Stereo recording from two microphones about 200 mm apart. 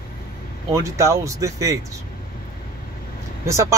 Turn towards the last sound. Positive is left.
turn(degrees=-15)  # may be behind; listen again after turning